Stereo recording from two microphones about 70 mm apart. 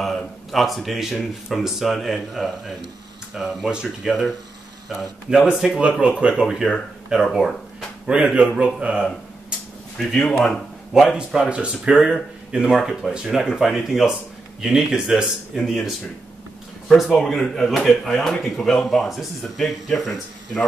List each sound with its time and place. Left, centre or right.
0.0 s speech: centre
5.8 s speech: centre
6.4 s speech: centre
9.9 s speech: centre
11.1 s speech: centre